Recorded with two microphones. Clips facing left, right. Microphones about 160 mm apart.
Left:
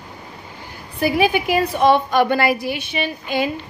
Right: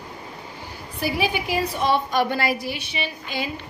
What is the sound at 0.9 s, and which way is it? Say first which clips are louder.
A woman's voice: left 7 dB; 55° left (ahead or behind).